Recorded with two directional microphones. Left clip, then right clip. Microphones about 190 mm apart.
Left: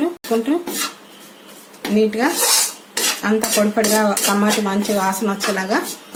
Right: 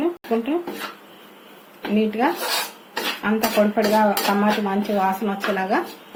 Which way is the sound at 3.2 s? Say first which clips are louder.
Even; 40° left (ahead or behind).